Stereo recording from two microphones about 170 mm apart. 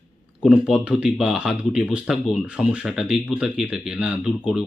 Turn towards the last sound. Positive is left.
turn(degrees=-5)  # may be behind; listen again after turning